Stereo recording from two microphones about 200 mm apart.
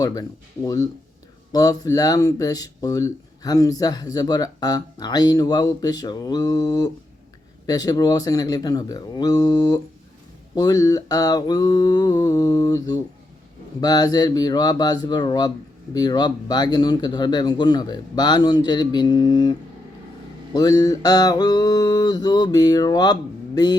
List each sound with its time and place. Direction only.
0.0 s speech: 20° left (ahead or behind)